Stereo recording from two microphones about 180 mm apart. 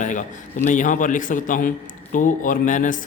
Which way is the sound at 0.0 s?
45° left (ahead or behind).